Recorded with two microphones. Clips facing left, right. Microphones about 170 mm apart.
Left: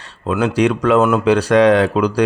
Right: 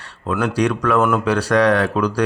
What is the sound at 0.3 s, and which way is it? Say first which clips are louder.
Speech: left 3 dB; 20° left (ahead or behind).